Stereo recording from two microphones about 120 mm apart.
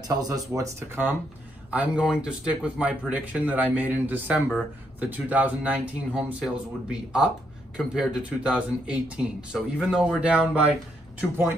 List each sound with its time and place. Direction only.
0.1 s speech: 30° right (ahead or behind)
1.7 s speech: 10° right (ahead or behind)